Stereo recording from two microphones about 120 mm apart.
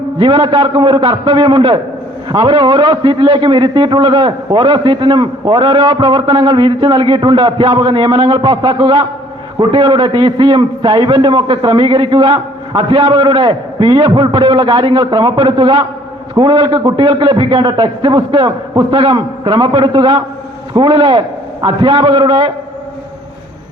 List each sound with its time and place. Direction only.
0.2 s a man's voice: 45° right (ahead or behind)